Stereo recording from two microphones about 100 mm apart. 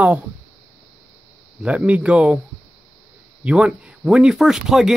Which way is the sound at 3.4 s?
10° right (ahead or behind).